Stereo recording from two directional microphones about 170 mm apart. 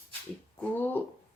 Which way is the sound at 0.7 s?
10° left (ahead or behind).